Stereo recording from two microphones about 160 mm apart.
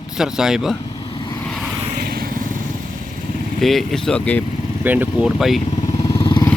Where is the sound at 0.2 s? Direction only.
5° right (ahead or behind).